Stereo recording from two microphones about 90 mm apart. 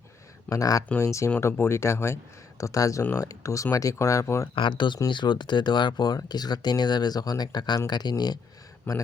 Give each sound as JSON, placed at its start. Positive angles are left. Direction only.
{"t": 0.5, "sound": "speech", "side_deg": 40}
{"t": 3.0, "sound": "speech", "side_deg": 25}
{"t": 4.5, "sound": "speech", "side_deg": 65}
{"t": 8.9, "sound": "speech", "side_deg": 20}